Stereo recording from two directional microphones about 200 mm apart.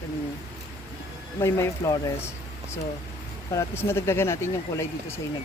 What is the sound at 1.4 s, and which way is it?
Speech, 15° left (ahead or behind).